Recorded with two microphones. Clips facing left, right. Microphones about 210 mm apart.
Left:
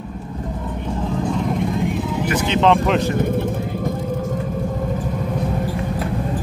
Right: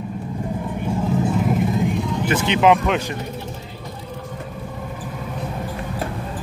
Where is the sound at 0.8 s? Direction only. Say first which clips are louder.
Right 2 dB; 5° right (ahead or behind).